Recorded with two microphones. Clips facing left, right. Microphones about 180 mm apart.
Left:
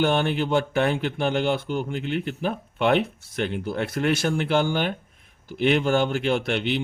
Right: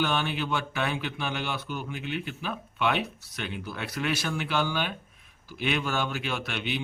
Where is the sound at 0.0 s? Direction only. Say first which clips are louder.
Left 6 dB; 50° left (ahead or behind).